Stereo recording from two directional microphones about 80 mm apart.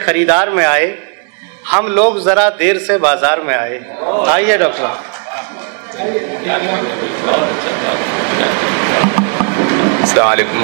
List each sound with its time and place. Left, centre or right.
0.0 s a man's voice: right